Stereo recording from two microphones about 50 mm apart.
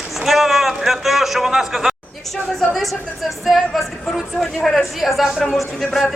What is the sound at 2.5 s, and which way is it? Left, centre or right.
A woman's voice, centre.